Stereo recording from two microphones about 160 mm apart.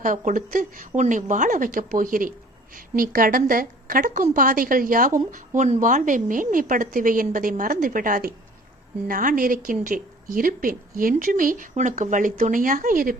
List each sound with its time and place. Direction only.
0.0 s a woman's voice: 55° right (ahead or behind)